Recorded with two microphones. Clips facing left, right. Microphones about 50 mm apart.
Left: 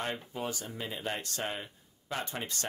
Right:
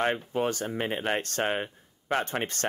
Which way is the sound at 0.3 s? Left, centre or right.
Right.